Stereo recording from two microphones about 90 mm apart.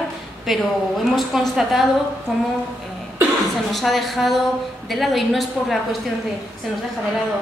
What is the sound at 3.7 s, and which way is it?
A woman's voice, centre (ahead or behind).